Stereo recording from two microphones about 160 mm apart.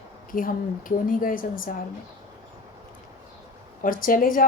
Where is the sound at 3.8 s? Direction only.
60° left (ahead or behind).